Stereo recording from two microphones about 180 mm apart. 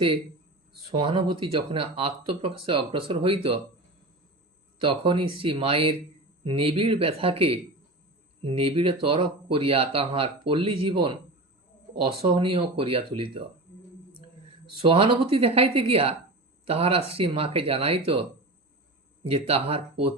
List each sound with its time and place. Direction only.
0.9 s speech: 25° right (ahead or behind)
4.8 s speech: 30° right (ahead or behind)
14.8 s speech: 30° right (ahead or behind)